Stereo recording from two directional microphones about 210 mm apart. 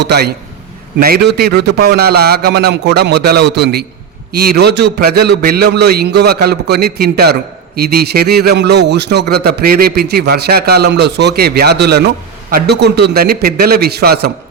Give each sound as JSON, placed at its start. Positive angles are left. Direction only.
{"t": 0.0, "sound": "a man's voice", "side_deg": -50}